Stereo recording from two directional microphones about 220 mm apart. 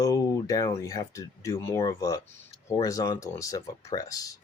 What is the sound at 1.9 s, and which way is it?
Speech, 15° left (ahead or behind).